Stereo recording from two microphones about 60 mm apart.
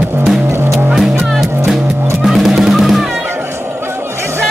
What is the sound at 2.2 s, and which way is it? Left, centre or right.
Drum, centre.